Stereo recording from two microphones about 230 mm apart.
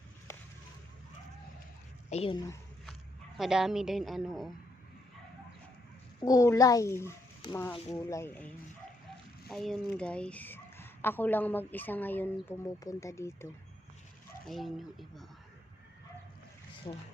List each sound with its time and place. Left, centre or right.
2.0 s a woman's voice: left
3.3 s a woman's voice: centre
6.1 s speech: centre
9.5 s speech: centre
14.4 s a woman's voice: centre
16.9 s a woman's voice: left